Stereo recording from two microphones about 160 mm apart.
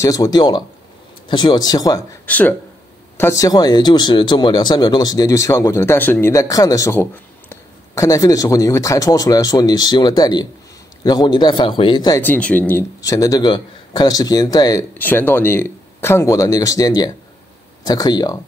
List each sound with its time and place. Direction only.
0.0 s speech: 20° left (ahead or behind)
2.2 s speech: 10° left (ahead or behind); by 12.2 s 30° left (ahead or behind)
12.2 s speech: 10° left (ahead or behind)